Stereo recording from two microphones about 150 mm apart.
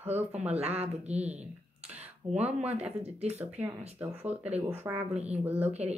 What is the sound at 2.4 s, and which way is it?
Speech, 45° right (ahead or behind).